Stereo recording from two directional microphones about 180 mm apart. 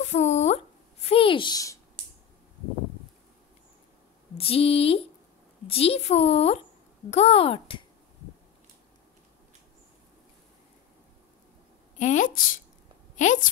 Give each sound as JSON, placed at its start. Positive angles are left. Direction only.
{"t": 0.0, "sound": "a sound", "side_deg": 40}
{"t": 4.4, "sound": "a woman's voice", "side_deg": 30}
{"t": 12.0, "sound": "a woman's voice", "side_deg": 45}